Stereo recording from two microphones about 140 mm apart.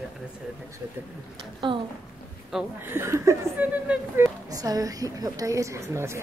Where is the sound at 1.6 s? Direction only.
35° right (ahead or behind).